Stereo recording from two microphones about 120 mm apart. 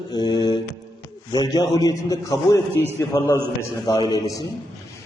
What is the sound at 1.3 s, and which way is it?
A man's voice, 35° left (ahead or behind).